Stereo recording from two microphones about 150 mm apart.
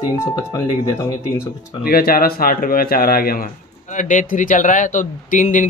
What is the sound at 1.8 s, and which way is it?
Speech, 85° left.